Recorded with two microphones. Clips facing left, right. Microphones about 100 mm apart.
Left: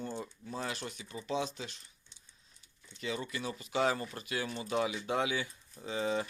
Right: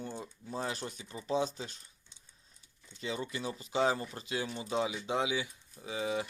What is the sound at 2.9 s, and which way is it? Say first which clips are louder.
Speech: even; 25° right (ahead or behind).